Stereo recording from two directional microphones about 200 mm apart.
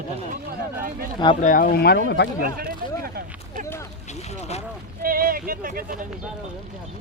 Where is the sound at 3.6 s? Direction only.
15° left (ahead or behind).